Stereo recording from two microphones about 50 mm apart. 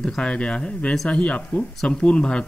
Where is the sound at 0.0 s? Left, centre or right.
Centre.